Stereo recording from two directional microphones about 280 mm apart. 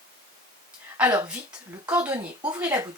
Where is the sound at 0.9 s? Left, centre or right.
Centre.